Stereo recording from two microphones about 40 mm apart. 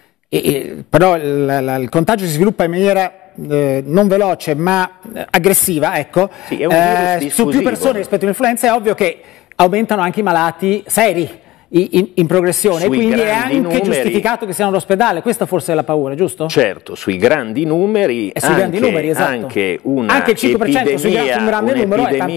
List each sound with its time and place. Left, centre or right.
0.3 s speech: centre
2.9 s a man's voice: centre
16.3 s speech: centre